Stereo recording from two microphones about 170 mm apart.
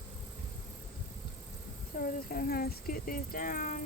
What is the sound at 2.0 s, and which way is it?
Speech, 60° left (ahead or behind).